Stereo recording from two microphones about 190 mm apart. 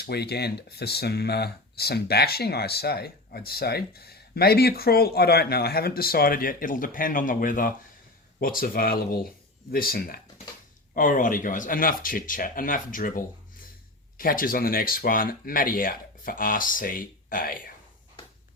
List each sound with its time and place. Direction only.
0.0 s speech: 60° left (ahead or behind)